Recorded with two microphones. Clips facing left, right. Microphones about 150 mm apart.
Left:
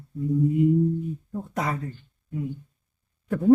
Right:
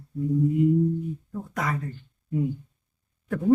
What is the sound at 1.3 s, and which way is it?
Speech, 25° left (ahead or behind).